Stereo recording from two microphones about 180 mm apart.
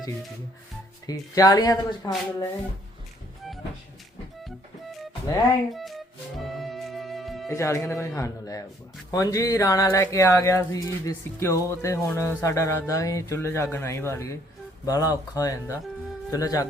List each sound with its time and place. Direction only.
1.0 s speech: 20° left (ahead or behind)
5.7 s speech: centre (ahead or behind)
6.4 s music: centre (ahead or behind)
7.4 s speech: 15° left (ahead or behind)